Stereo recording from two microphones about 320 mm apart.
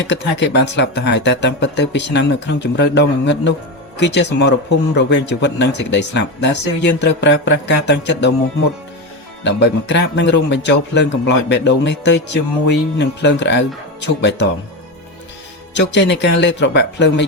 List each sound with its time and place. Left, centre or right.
0.1 s speech: left
9.4 s speech: left
15.7 s speech: left